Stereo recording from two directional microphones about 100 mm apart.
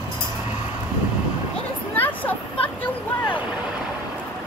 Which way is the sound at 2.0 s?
15° left (ahead or behind).